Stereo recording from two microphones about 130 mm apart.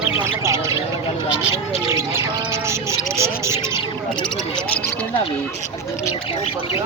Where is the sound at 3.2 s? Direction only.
20° right (ahead or behind).